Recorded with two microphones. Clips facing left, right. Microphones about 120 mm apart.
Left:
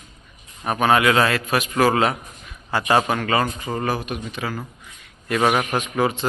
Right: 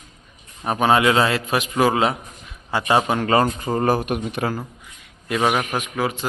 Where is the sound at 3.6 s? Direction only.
40° right (ahead or behind).